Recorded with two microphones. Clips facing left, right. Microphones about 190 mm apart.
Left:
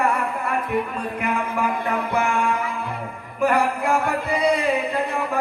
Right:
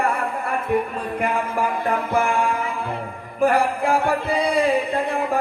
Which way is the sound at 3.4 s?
30° right (ahead or behind).